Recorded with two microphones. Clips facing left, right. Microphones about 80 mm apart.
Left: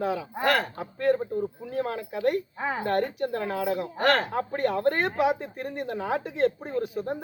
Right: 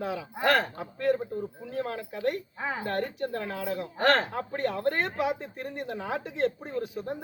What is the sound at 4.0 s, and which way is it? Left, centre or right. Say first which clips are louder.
Speech: even; right.